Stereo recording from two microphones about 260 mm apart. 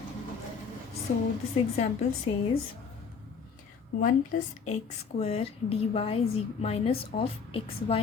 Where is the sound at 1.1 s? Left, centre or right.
Left.